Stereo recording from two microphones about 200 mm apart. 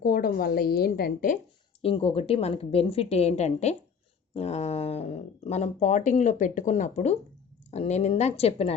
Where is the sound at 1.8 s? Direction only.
30° left (ahead or behind).